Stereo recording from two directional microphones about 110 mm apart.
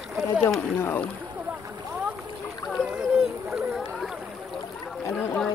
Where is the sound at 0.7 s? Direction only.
20° left (ahead or behind).